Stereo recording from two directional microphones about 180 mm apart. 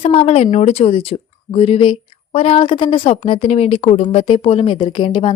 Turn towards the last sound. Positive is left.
turn(degrees=30)  # may be behind; listen again after turning